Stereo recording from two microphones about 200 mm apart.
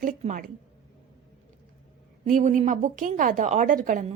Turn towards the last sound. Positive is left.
turn(degrees=-40)  # may be behind; listen again after turning